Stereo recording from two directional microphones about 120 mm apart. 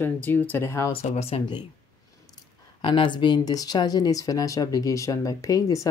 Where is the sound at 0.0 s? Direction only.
15° left (ahead or behind).